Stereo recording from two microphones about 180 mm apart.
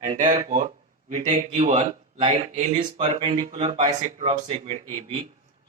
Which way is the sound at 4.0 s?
40° right (ahead or behind).